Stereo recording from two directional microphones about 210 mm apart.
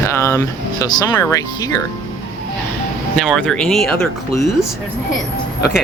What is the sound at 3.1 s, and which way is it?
Speech, centre (ahead or behind).